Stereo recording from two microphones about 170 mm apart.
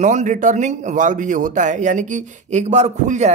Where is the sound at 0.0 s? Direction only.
45° right (ahead or behind).